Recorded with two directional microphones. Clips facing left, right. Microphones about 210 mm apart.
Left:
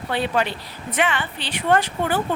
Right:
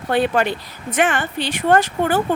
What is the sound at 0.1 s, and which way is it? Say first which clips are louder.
Speech: right 5 dB; 50° right (ahead or behind).